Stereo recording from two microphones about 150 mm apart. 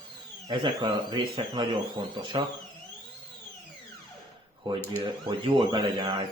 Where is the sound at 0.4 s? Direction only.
30° right (ahead or behind).